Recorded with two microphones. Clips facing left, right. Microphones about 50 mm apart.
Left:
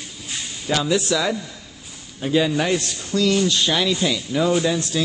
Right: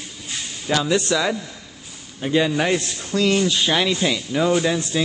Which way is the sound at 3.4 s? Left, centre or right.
Centre.